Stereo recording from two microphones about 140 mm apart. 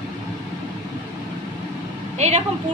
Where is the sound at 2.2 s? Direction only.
50° right (ahead or behind).